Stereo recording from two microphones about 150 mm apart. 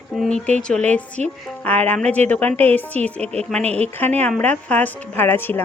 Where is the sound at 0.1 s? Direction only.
5° left (ahead or behind).